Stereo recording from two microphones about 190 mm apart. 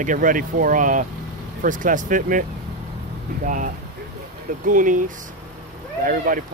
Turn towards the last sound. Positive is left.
turn(degrees=-45)  # may be behind; listen again after turning